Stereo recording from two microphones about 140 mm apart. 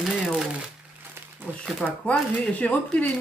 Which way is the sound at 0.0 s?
Centre (ahead or behind).